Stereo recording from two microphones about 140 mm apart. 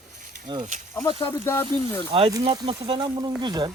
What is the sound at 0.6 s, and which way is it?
Speech, 65° right (ahead or behind).